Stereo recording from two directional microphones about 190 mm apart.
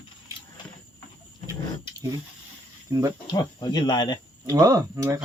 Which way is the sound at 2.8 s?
15° right (ahead or behind).